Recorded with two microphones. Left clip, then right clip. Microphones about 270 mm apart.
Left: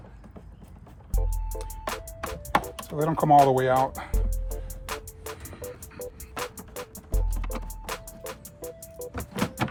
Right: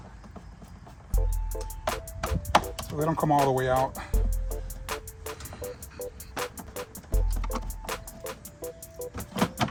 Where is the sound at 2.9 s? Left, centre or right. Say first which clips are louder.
Left 3 dB; left.